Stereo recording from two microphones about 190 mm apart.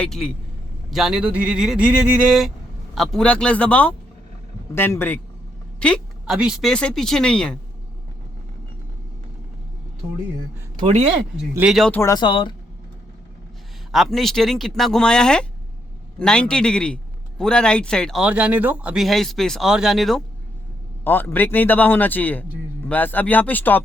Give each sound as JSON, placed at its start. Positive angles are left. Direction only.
{"t": 0.0, "sound": "a man's voice", "side_deg": 5}
{"t": 10.8, "sound": "speech", "side_deg": -35}
{"t": 11.5, "sound": "a man's voice", "side_deg": -5}
{"t": 11.9, "sound": "speech", "side_deg": 20}
{"t": 13.9, "sound": "a man's voice", "side_deg": 0}